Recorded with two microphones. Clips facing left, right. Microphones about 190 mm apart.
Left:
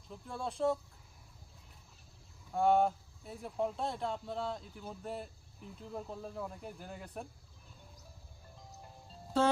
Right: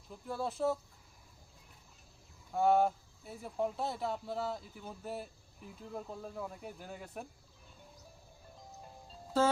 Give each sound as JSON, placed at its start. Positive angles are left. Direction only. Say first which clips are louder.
{"t": 0.1, "sound": "speech", "louder": "right 3 dB", "side_deg": -5}
{"t": 2.5, "sound": "speech", "louder": "even", "side_deg": 0}